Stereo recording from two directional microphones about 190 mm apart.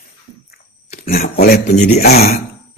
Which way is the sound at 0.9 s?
50° left (ahead or behind).